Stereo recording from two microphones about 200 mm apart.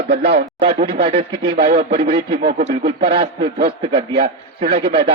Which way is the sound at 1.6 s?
50° right (ahead or behind).